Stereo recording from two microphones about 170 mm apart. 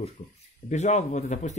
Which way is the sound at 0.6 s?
45° left (ahead or behind).